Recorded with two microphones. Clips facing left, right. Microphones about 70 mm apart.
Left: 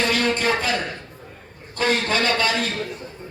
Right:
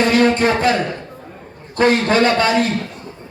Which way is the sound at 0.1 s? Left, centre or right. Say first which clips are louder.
Right 7 dB; right.